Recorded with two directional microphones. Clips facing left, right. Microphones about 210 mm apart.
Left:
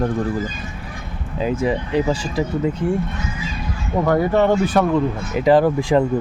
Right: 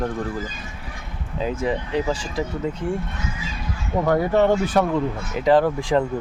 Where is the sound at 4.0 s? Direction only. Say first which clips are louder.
Left 2 dB; 75° left (ahead or behind).